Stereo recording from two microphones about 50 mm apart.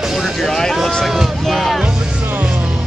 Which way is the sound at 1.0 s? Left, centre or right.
Centre.